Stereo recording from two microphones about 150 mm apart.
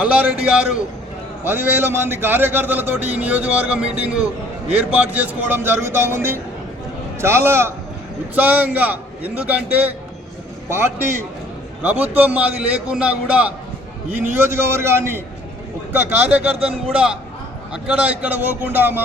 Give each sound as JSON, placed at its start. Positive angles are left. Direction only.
{"t": 0.0, "sound": "a man's voice", "side_deg": -5}